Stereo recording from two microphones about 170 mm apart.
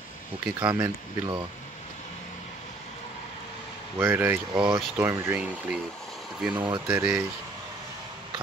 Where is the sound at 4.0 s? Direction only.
15° right (ahead or behind).